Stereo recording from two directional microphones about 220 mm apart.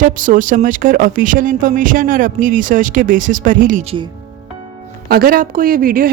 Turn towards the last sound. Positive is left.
turn(degrees=-40)  # may be behind; listen again after turning